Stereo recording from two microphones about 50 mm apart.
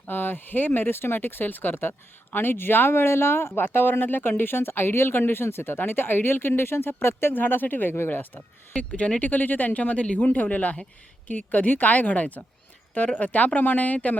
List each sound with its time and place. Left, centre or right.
0.1 s speech: left
8.4 s speech: left
9.3 s speech: left